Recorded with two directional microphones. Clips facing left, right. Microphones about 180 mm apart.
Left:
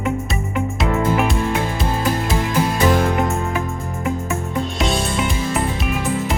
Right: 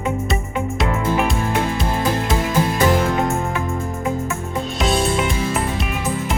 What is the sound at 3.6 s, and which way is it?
Music, centre (ahead or behind).